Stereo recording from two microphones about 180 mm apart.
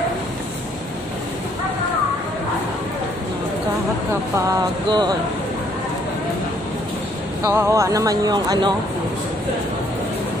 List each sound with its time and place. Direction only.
4.5 s speech: 25° right (ahead or behind)
7.4 s speech: 15° right (ahead or behind)